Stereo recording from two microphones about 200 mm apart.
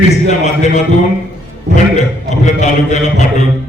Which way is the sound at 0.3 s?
35° left (ahead or behind).